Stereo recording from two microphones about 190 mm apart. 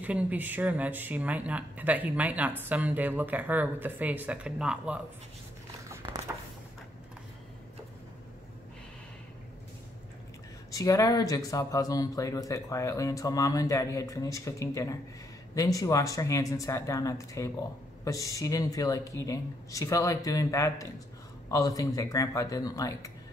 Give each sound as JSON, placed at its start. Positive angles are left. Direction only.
{"t": 0.0, "sound": "speech", "side_deg": -5}
{"t": 6.0, "sound": "a sound", "side_deg": -20}
{"t": 10.7, "sound": "speech", "side_deg": 15}